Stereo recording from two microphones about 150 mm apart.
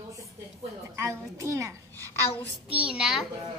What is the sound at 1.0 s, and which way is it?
Speech, 20° right (ahead or behind).